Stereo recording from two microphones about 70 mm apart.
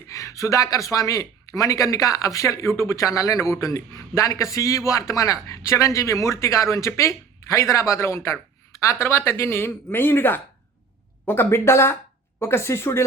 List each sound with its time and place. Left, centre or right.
0.1 s speech: left